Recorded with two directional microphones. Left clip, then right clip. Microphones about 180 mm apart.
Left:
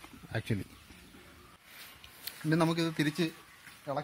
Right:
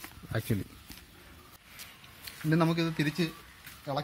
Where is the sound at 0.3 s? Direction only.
10° right (ahead or behind).